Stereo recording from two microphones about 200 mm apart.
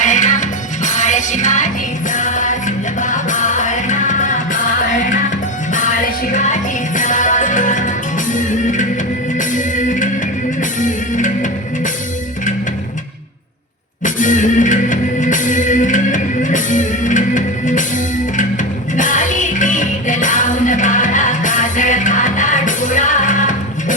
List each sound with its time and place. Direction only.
0.0 s music: 40° left (ahead or behind)
6.3 s music: 40° left (ahead or behind)
14.0 s music: 40° left (ahead or behind)
18.9 s music: 40° left (ahead or behind)